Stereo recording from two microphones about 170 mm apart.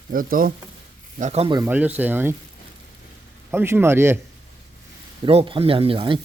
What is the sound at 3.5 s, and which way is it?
Speech, 15° right (ahead or behind).